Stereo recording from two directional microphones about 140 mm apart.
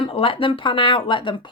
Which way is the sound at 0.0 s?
40° left (ahead or behind).